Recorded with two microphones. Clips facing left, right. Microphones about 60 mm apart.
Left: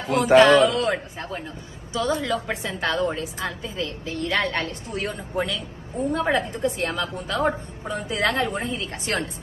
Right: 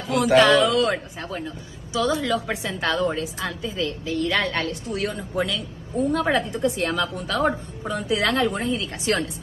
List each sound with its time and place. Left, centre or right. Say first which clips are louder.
0.0 s a woman's voice: left 2 dB; left
5.9 s a woman's voice: right 1 dB; left